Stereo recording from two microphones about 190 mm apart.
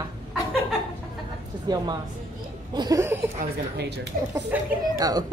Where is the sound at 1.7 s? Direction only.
20° right (ahead or behind).